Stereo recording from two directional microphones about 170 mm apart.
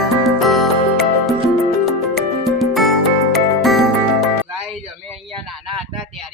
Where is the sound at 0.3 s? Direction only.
Centre (ahead or behind).